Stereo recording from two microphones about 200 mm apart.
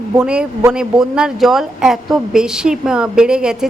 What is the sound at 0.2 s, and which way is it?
Speech, 5° right (ahead or behind).